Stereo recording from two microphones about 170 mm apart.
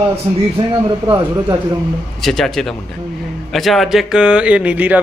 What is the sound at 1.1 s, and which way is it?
Speech, 20° right (ahead or behind).